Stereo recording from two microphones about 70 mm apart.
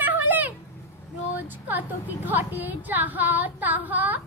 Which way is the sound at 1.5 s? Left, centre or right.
Right.